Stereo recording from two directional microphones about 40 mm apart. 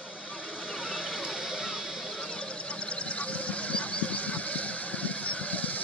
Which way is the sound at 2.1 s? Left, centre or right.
Left.